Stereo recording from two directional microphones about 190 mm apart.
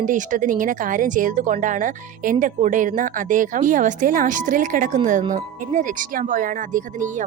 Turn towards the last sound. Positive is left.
turn(degrees=-45)  # may be behind; listen again after turning